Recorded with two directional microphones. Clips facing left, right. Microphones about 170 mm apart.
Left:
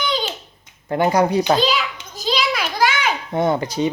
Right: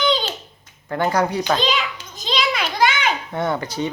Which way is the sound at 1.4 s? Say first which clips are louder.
Left 3 dB; 5° left (ahead or behind).